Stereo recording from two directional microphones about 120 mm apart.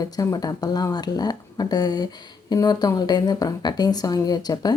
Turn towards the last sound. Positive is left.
turn(degrees=35)  # may be behind; listen again after turning